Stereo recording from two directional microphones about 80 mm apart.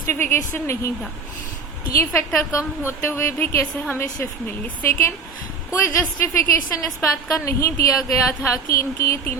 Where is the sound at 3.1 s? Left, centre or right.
Left.